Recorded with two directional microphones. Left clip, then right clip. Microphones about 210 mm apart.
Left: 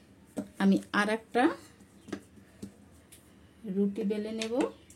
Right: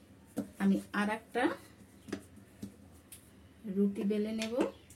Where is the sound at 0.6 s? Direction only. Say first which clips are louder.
Left 6 dB; 55° left (ahead or behind).